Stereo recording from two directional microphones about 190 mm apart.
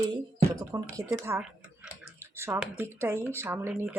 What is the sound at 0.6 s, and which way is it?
Speech, 15° right (ahead or behind).